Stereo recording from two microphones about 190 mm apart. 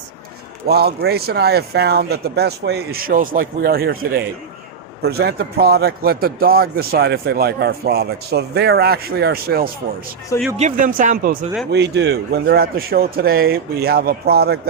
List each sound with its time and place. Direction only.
0.7 s speech: 55° right (ahead or behind)
11.7 s speech: 60° right (ahead or behind)